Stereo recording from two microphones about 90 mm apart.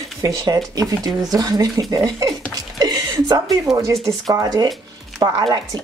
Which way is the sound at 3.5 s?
40° right (ahead or behind).